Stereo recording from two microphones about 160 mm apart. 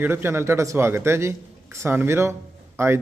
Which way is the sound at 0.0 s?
15° right (ahead or behind).